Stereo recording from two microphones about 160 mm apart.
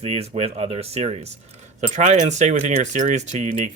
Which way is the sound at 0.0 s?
40° right (ahead or behind).